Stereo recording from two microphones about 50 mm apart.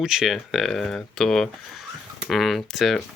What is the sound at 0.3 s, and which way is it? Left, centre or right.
Speech, centre.